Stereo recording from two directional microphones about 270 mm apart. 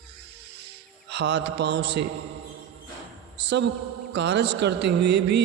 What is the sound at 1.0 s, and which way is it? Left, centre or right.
A man's voice, right.